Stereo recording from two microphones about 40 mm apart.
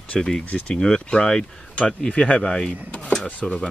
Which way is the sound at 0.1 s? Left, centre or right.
Centre.